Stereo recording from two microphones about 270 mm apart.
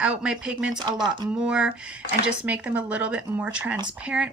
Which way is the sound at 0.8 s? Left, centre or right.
Centre.